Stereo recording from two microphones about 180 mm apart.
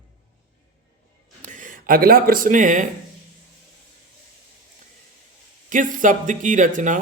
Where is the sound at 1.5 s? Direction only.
45° right (ahead or behind).